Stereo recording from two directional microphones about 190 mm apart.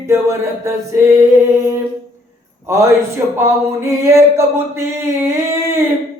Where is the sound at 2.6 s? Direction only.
15° right (ahead or behind).